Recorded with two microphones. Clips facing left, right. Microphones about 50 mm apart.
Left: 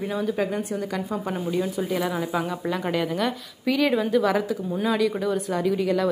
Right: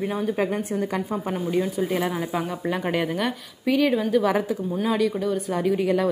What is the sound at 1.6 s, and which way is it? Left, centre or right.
Speech, centre.